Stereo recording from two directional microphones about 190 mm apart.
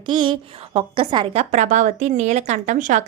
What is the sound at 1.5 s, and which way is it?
A woman's voice, 40° right (ahead or behind).